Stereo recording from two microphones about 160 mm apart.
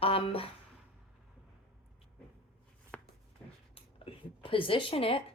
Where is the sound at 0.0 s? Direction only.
35° left (ahead or behind).